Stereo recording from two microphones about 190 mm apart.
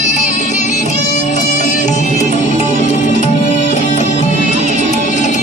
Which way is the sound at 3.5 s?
40° left (ahead or behind).